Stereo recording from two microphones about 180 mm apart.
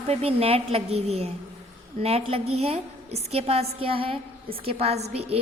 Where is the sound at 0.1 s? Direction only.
35° right (ahead or behind).